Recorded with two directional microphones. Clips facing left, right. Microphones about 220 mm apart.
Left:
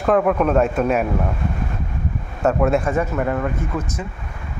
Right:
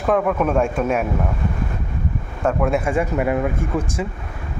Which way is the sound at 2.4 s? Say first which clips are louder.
Left 2 dB; 5° left (ahead or behind).